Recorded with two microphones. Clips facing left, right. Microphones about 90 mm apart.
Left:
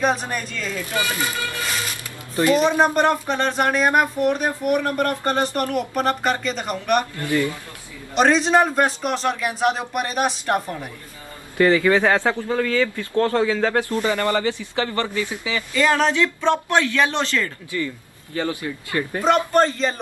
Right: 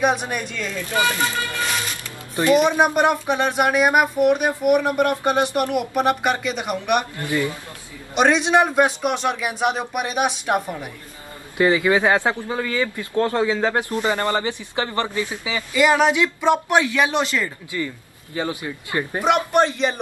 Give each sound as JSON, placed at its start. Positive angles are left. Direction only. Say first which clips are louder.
{"t": 0.0, "sound": "speech", "louder": "right 1 dB", "side_deg": -5}
{"t": 2.5, "sound": "speech", "louder": "right 2 dB", "side_deg": -10}
{"t": 7.2, "sound": "a man's voice", "louder": "left 1 dB", "side_deg": -20}
{"t": 8.1, "sound": "speech", "louder": "even", "side_deg": -5}